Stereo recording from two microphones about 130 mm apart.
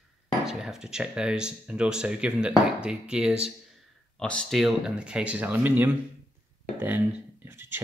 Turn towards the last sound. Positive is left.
turn(degrees=-15)  # may be behind; listen again after turning